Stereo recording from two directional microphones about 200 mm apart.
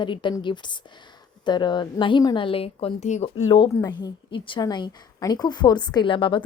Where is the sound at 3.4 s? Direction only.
20° left (ahead or behind).